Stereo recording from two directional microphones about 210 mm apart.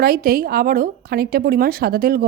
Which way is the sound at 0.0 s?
45° right (ahead or behind).